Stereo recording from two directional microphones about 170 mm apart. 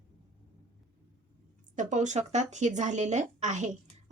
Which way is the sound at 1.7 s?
45° right (ahead or behind).